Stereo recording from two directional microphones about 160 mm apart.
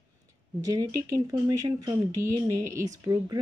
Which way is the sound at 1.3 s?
20° right (ahead or behind).